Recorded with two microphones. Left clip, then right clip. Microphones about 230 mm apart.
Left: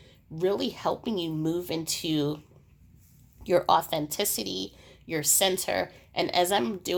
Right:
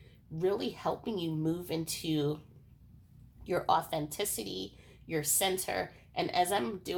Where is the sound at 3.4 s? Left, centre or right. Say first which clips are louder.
Left 7 dB; left.